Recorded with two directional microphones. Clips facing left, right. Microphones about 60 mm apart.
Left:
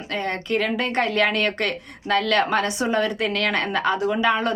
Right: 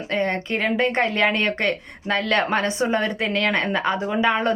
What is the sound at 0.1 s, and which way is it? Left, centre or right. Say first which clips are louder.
Speech: right 1 dB; right.